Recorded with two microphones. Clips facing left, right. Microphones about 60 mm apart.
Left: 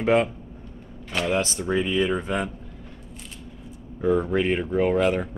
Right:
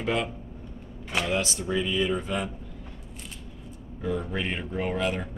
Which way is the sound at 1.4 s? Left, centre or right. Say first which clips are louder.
Left 4 dB; left.